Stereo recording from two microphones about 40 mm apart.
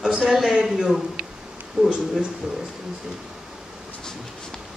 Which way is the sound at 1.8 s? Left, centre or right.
Right.